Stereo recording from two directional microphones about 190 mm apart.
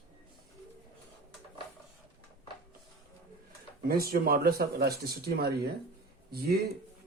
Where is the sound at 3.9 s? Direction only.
50° right (ahead or behind).